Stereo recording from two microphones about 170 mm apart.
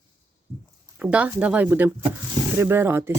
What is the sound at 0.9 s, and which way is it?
Speech, 5° right (ahead or behind).